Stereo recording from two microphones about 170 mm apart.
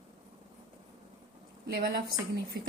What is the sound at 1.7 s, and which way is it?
Speech, 60° right (ahead or behind).